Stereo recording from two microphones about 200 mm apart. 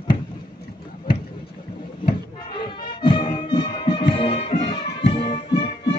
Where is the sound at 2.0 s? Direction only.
25° left (ahead or behind).